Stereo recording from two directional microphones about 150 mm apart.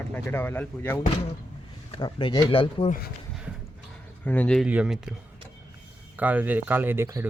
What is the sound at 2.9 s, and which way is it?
Speech, 90° left.